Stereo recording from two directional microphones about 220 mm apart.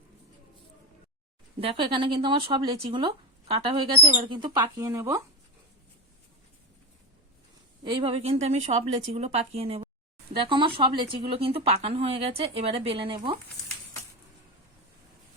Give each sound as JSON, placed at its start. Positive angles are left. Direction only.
{"t": 1.6, "sound": "speech", "side_deg": -20}
{"t": 7.9, "sound": "speech", "side_deg": -25}